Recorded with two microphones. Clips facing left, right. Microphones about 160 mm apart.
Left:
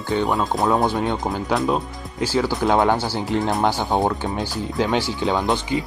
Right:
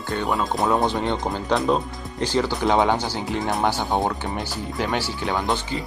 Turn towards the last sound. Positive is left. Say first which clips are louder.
# left 3 dB
turn(degrees=20)  # may be behind; listen again after turning